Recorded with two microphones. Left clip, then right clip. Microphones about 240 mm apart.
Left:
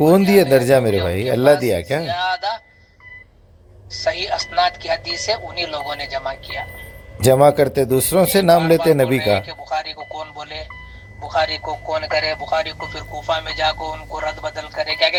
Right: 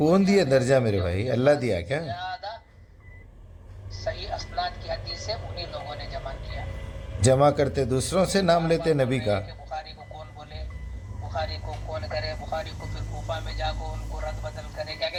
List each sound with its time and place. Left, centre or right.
0.0 s speech: left
2.0 s a sound: left
3.9 s speech: left
7.2 s speech: left
9.2 s speech: left